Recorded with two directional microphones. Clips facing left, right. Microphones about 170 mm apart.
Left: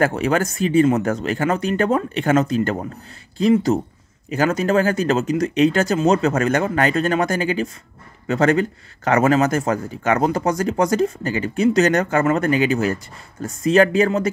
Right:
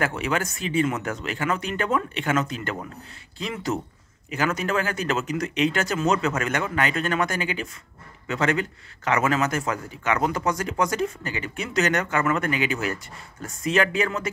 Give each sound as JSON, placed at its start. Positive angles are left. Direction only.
{"t": 0.0, "sound": "speech", "side_deg": 40}